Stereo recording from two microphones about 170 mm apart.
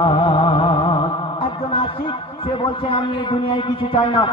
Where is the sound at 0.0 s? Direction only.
30° left (ahead or behind).